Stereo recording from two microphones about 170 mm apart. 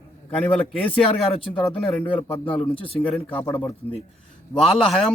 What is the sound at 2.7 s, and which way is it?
Speech, 30° left (ahead or behind).